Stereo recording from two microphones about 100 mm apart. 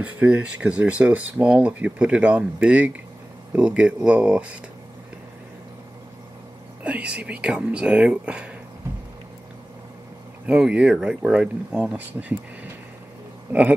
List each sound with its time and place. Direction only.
0.0 s speech: 10° right (ahead or behind)
6.8 s speech: 15° right (ahead or behind)
10.4 s speech: 10° right (ahead or behind)
13.5 s speech: 15° right (ahead or behind)